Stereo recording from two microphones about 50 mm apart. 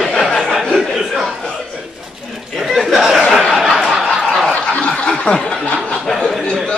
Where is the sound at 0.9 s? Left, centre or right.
Centre.